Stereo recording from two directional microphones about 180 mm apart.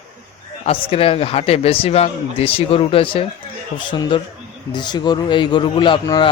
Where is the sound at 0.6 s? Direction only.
35° left (ahead or behind).